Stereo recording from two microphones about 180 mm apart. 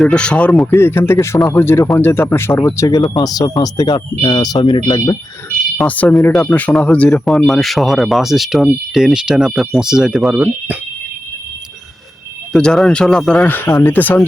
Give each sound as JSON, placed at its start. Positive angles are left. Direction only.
{"t": 0.0, "sound": "speech", "side_deg": 5}
{"t": 5.7, "sound": "speech", "side_deg": 10}
{"t": 12.5, "sound": "speech", "side_deg": 0}